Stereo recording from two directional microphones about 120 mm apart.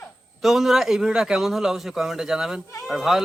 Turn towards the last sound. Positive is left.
turn(degrees=-5)  # may be behind; listen again after turning